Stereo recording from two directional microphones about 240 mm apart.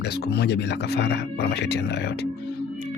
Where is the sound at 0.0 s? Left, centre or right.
Left.